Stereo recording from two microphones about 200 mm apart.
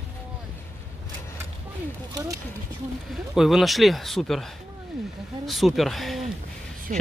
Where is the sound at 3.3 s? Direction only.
Centre (ahead or behind).